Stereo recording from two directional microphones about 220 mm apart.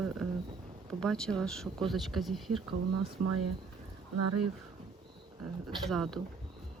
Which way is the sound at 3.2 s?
90° right.